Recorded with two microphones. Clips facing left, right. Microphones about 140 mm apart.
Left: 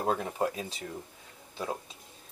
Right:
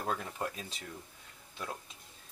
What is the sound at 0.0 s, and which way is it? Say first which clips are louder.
Speech: left 7 dB; 25° left (ahead or behind).